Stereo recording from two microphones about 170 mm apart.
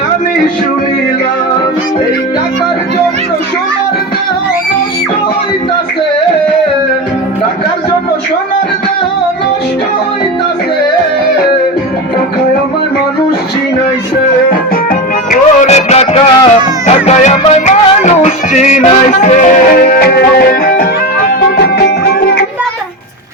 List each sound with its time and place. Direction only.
15.3 s music: 40° left (ahead or behind); by 22.4 s 65° left (ahead or behind)